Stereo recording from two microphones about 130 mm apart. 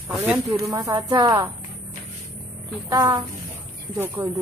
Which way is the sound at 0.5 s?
25° right (ahead or behind).